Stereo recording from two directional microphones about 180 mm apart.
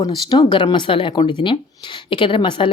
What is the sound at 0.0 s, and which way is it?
Speech, 25° left (ahead or behind).